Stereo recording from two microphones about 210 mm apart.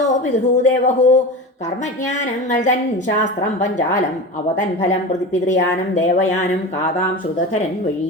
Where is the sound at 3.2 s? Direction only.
35° left (ahead or behind).